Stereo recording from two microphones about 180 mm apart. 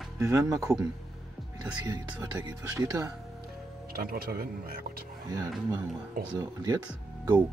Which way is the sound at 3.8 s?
55° right (ahead or behind).